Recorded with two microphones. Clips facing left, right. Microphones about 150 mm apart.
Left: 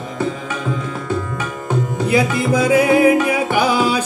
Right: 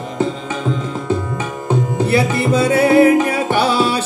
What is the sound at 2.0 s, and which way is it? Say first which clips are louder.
Music: left 1 dB; 15° left (ahead or behind).